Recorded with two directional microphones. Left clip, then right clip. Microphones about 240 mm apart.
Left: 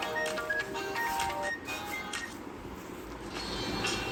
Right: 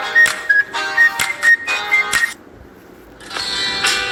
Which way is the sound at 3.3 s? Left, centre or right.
Right.